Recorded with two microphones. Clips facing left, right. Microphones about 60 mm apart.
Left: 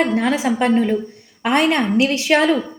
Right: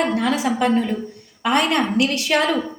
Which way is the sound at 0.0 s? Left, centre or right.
Left.